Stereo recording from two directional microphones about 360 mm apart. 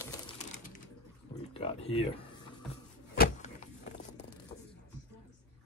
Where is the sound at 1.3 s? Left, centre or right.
Centre.